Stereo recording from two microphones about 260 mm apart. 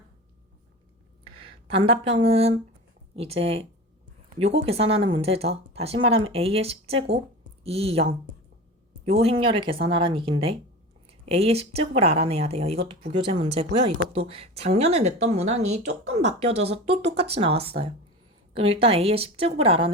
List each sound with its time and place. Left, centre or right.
1.4 s speech: right
9.2 s speech: right